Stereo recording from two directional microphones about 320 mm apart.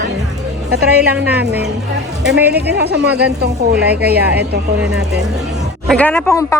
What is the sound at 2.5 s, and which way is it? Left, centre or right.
A woman's voice, right.